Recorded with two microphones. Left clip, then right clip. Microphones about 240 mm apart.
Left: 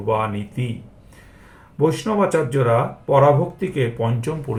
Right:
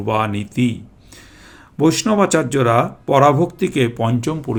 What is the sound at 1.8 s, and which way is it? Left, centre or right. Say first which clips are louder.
Speech: right 3 dB; right.